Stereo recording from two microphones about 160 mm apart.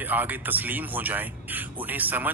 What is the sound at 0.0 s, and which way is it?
Speech, 10° right (ahead or behind).